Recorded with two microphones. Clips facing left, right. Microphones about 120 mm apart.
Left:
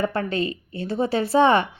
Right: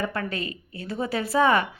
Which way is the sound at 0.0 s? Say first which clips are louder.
Left 5 dB; 30° left (ahead or behind).